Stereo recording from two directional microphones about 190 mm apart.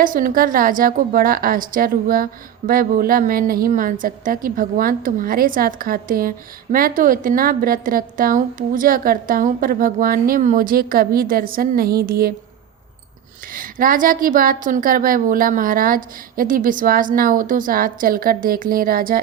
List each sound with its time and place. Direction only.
0.0 s a woman's voice: 45° right (ahead or behind)
13.5 s a woman's voice: 45° right (ahead or behind)